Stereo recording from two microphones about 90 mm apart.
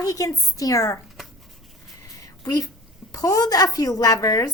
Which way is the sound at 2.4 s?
45° left (ahead or behind).